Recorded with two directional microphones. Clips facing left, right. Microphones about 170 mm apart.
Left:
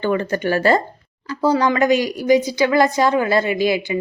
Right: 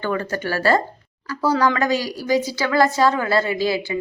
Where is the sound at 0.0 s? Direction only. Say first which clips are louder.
Left 4 dB; 20° left (ahead or behind).